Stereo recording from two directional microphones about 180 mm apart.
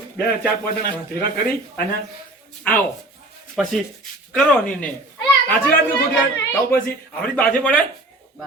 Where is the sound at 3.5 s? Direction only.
Centre (ahead or behind).